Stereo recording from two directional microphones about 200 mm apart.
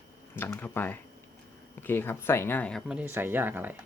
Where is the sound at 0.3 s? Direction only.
10° left (ahead or behind); by 3.8 s 10° right (ahead or behind).